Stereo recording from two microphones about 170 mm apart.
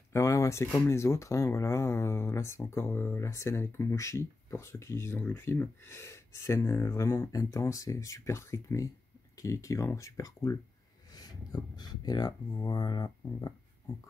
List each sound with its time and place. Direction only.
0.1 s speech: 15° left (ahead or behind)